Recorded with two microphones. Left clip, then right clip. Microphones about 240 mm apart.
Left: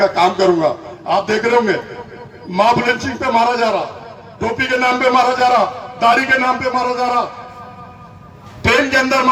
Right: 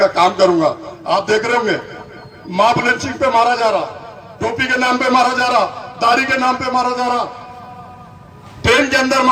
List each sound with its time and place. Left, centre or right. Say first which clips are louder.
0.0 s a man's voice: right 1 dB; right
8.6 s a man's voice: even; right